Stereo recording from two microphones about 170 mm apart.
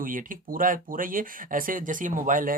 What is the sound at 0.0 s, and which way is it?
Speech, 55° right (ahead or behind).